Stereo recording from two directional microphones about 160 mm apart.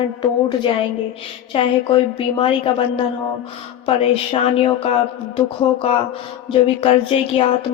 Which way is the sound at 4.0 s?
35° left (ahead or behind).